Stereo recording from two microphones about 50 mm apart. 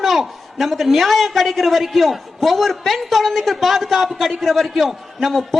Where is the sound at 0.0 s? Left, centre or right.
Centre.